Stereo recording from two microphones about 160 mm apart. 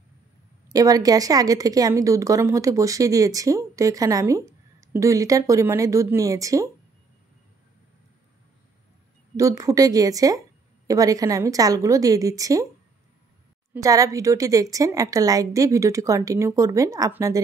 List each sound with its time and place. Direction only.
0.7 s a woman's voice: 20° right (ahead or behind)
9.4 s a woman's voice: 20° right (ahead or behind)
13.7 s a woman's voice: 20° right (ahead or behind)